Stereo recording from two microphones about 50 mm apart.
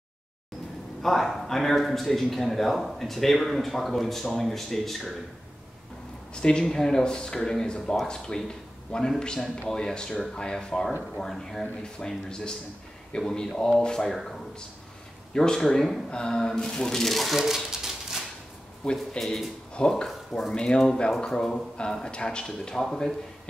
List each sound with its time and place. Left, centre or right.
1.0 s speech: centre
6.3 s speech: centre
17.6 s a sound: centre
18.9 s speech: centre
20.5 s speech: centre